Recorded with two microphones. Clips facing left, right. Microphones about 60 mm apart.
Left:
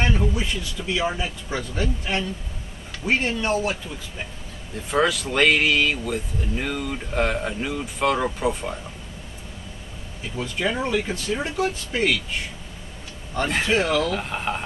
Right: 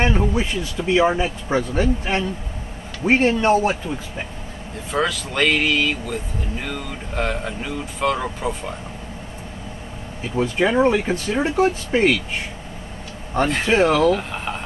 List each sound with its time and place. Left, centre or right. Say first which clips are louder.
0.0 s speech: right 4 dB; right
4.9 s speech: left 1 dB; centre
10.3 s speech: right 7 dB; right
13.4 s speech: right 4 dB; right
14.1 s speech: right 1 dB; centre